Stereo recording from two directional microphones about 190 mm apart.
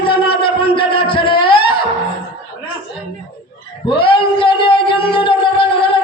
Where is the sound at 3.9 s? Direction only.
25° left (ahead or behind).